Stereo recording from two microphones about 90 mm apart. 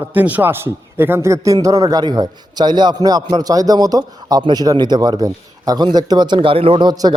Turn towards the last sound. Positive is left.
turn(degrees=-55)  # may be behind; listen again after turning